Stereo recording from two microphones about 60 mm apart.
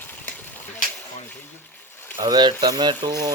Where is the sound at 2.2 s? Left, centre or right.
Right.